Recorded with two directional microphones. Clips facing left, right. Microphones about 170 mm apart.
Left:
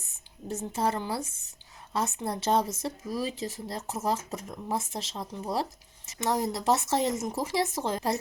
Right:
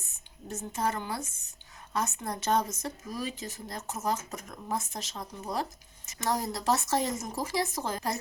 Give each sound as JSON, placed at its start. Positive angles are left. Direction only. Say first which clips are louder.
{"t": 0.4, "sound": "a woman's voice", "louder": "left 3 dB", "side_deg": 30}